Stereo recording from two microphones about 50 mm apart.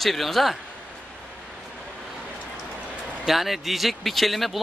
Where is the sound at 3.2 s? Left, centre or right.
Centre.